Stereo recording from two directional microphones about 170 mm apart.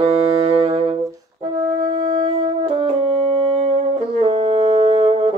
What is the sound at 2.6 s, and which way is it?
French horn, 35° right (ahead or behind).